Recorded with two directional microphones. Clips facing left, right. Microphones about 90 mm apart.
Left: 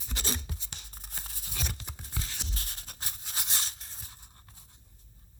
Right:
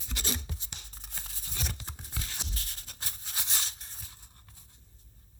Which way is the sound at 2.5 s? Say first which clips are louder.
Left 2 dB; 35° left (ahead or behind).